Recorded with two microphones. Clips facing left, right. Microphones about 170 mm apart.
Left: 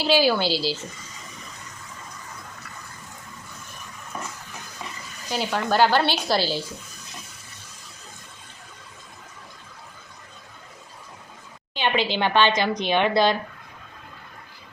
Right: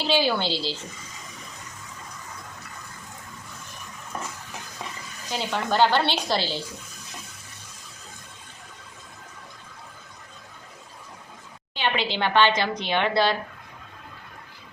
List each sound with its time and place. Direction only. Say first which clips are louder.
0.0 s speech: left 3 dB; 10° left (ahead or behind)
5.3 s speech: left 2 dB; 10° left (ahead or behind)
11.7 s speech: left 3 dB; 15° left (ahead or behind)